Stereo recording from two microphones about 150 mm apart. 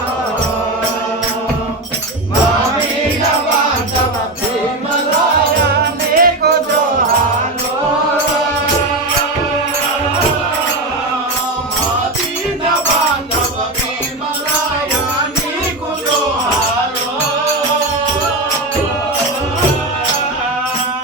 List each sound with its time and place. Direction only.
6.1 s music: 75° right (ahead or behind)